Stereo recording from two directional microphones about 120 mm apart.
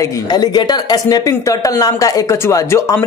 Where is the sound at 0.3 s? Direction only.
35° left (ahead or behind).